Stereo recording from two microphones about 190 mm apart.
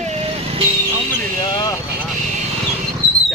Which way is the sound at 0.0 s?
35° right (ahead or behind).